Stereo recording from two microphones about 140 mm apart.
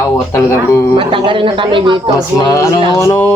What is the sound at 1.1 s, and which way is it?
Speech, 40° right (ahead or behind).